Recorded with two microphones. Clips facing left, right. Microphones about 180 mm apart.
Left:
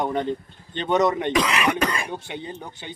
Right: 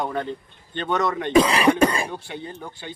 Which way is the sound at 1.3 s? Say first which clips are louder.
Right 5 dB; 30° right (ahead or behind).